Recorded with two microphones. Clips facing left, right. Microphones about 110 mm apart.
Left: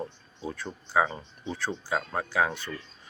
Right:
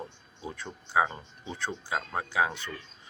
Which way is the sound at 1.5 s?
20° right (ahead or behind).